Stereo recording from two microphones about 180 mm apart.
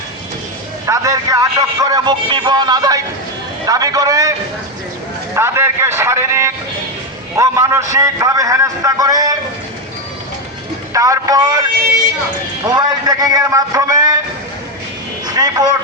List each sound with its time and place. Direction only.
0.9 s a man's voice: 20° right (ahead or behind)
5.3 s a man's voice: 15° right (ahead or behind)
10.9 s a man's voice: 20° right (ahead or behind)
12.6 s a man's voice: 20° right (ahead or behind)
15.3 s speech: 20° right (ahead or behind)